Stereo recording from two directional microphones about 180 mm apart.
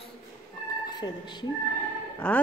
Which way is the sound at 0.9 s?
25° left (ahead or behind).